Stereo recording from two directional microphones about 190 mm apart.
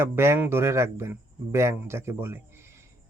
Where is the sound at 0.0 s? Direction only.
15° right (ahead or behind).